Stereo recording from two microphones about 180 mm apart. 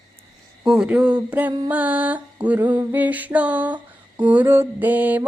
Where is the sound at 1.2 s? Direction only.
10° right (ahead or behind).